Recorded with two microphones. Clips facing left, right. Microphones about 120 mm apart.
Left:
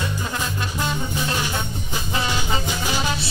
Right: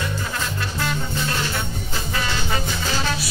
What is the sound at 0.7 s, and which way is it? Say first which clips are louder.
Music: even; 15° left (ahead or behind).